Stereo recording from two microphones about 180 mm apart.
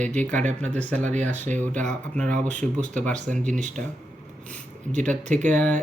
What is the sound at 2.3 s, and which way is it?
Speech, 45° right (ahead or behind).